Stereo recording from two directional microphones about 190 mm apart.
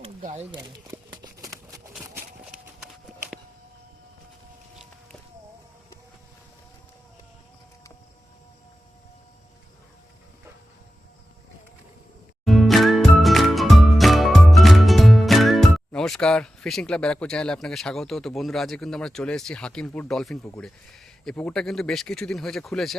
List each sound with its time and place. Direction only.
0.2 s speech: 40° right (ahead or behind)
0.5 s a sound: 20° right (ahead or behind)
2.5 s horse: 5° right (ahead or behind)
12.5 s music: centre (ahead or behind)
20.6 s speech: centre (ahead or behind)